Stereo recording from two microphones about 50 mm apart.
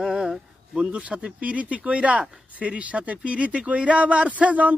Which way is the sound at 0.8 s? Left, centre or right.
Right.